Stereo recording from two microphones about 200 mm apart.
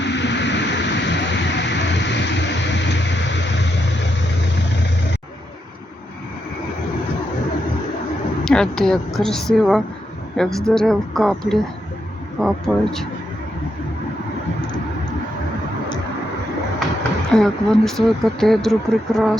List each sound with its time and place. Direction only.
0.0 s a sound: 60° left (ahead or behind)
8.4 s speech: 5° left (ahead or behind)
17.3 s speech: centre (ahead or behind)